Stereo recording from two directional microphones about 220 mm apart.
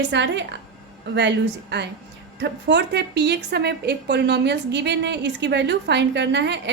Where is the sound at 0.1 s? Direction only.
50° right (ahead or behind).